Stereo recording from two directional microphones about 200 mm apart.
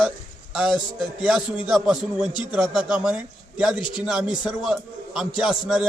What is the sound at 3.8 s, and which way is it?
Speech, 25° left (ahead or behind).